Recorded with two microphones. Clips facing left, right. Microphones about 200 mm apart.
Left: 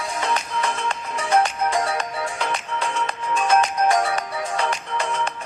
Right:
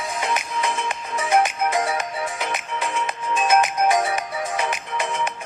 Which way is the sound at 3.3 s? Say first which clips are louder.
Even; 20° right (ahead or behind).